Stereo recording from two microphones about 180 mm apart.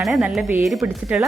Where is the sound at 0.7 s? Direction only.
15° right (ahead or behind).